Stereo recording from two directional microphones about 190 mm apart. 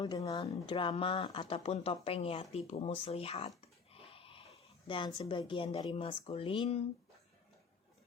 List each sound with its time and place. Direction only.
0.0 s a woman's voice: 20° left (ahead or behind)